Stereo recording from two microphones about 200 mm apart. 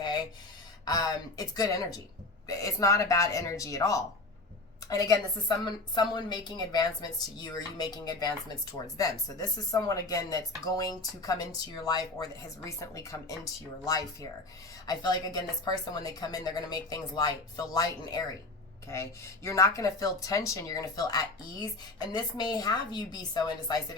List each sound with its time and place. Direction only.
0.0 s a sound: 20° left (ahead or behind)
0.9 s speech: 20° left (ahead or behind)
19.5 s speech: 15° left (ahead or behind)